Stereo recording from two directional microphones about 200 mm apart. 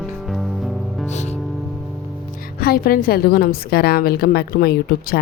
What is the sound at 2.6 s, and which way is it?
Speech, 50° left (ahead or behind).